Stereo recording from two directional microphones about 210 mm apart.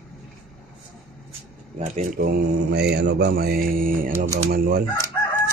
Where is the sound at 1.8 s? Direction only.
35° right (ahead or behind).